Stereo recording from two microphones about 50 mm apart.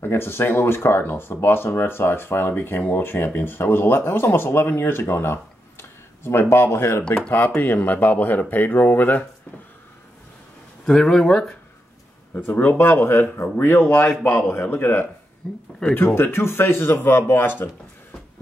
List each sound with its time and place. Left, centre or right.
0.0 s speech: left
7.2 s speech: left
10.9 s speech: centre
12.7 s speech: left
14.3 s speech: left
15.4 s speech: centre
16.2 s speech: left